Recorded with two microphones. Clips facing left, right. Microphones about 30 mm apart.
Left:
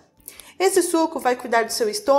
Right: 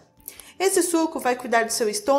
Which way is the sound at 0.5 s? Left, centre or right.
Left.